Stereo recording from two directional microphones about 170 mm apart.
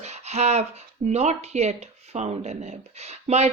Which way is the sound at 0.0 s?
40° right (ahead or behind).